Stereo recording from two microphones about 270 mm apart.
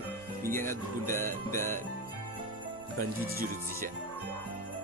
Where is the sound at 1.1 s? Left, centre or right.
Centre.